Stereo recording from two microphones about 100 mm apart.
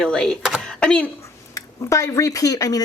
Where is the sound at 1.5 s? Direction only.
30° left (ahead or behind).